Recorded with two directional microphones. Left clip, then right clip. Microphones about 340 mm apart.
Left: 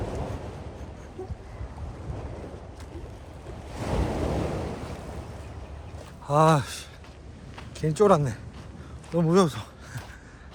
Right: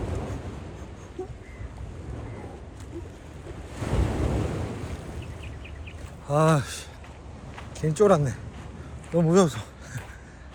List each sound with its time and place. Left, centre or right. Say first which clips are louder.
0.0 s vehicle: left 1 dB; left
3.8 s thunder: left 1 dB; left
6.2 s speech: left 2 dB; centre